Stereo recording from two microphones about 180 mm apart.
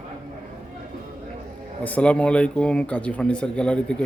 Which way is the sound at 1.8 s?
5° left (ahead or behind).